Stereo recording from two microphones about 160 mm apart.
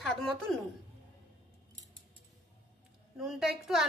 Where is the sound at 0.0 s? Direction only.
Centre (ahead or behind).